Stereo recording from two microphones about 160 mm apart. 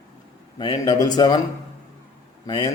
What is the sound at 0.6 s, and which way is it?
Speech, 25° left (ahead or behind).